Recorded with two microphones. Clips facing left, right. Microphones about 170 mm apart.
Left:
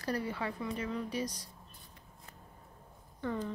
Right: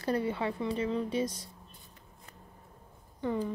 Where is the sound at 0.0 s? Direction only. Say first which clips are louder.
Right 5 dB; 25° right (ahead or behind).